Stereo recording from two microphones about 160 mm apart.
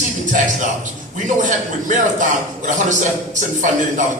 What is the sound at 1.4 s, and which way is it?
Speech, 50° right (ahead or behind).